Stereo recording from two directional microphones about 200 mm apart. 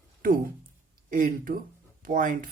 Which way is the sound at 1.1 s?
40° right (ahead or behind).